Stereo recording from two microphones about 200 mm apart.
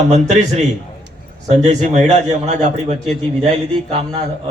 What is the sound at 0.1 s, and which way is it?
A man's voice, 35° right (ahead or behind).